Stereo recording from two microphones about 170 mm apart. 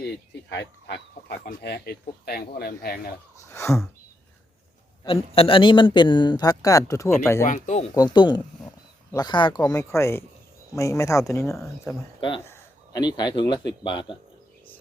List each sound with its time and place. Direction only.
0.5 s speech: 90° left
1.5 s speech: 65° left (ahead or behind)
3.4 s speech: 15° left (ahead or behind)
5.0 s speech: 35° left (ahead or behind); by 7.1 s 20° left (ahead or behind)
7.4 s speech: 45° left (ahead or behind)
7.9 s a man's voice: 25° left (ahead or behind)